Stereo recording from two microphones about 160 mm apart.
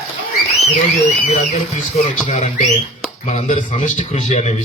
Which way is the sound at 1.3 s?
50° left (ahead or behind).